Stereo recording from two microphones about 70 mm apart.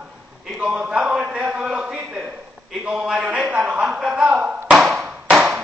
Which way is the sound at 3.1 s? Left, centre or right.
Centre.